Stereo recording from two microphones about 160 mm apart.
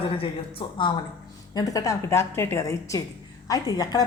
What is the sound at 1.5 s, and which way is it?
A woman's voice, 20° left (ahead or behind).